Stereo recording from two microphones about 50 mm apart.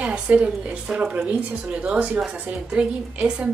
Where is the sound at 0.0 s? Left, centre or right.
Right.